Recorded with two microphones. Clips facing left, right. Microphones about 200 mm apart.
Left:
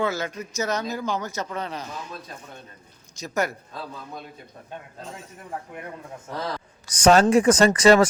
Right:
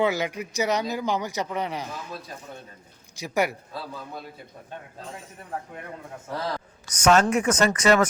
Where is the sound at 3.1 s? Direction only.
15° right (ahead or behind).